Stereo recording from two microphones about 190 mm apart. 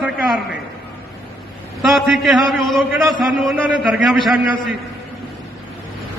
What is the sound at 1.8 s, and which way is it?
A man's voice, centre (ahead or behind).